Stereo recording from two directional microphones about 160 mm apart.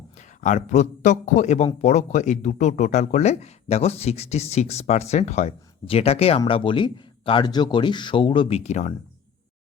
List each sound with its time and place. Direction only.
0.2 s a man's voice: 50° left (ahead or behind)